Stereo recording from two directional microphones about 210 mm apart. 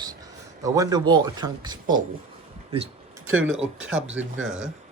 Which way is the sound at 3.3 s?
80° right.